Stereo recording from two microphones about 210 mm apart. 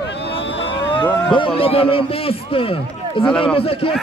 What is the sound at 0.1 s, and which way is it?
Boat, 55° left (ahead or behind).